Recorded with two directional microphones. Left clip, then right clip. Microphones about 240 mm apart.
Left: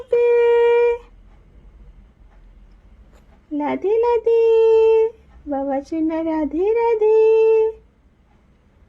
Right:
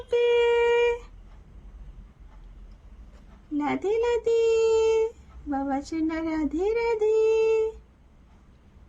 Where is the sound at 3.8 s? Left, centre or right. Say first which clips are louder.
Left 8 dB; right.